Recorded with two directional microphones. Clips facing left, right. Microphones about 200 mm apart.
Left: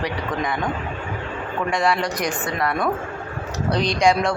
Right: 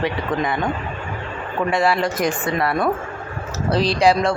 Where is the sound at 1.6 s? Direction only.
5° right (ahead or behind).